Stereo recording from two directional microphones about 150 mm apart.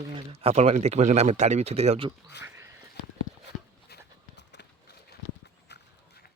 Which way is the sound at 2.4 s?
20° right (ahead or behind).